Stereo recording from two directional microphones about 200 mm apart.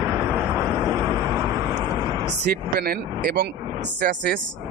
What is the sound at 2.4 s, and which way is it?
Speech, 50° right (ahead or behind).